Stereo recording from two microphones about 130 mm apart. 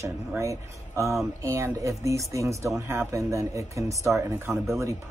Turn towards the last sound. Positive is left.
turn(degrees=-20)  # may be behind; listen again after turning